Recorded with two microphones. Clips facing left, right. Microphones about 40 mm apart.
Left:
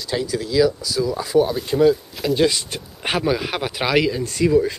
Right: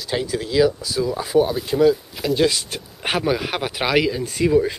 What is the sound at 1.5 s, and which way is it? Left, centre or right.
Speech, centre.